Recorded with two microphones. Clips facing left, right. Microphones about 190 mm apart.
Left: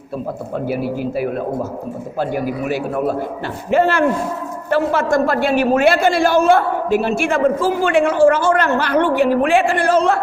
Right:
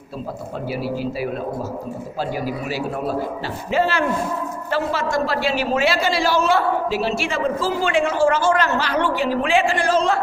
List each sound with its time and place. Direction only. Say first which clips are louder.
0.7 s a man's voice: left 3 dB; 55° left (ahead or behind)